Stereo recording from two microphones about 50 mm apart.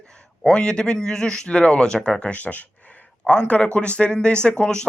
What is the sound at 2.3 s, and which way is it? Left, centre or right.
Speech, left.